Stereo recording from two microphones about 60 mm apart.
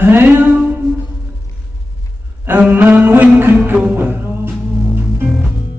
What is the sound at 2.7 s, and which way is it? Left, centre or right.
Music, right.